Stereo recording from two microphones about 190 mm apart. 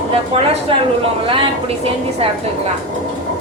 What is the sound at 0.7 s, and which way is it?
A woman's voice, 30° right (ahead or behind).